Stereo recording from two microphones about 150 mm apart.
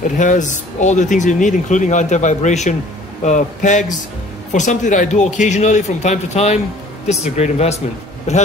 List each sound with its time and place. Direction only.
0.2 s speech: 55° left (ahead or behind)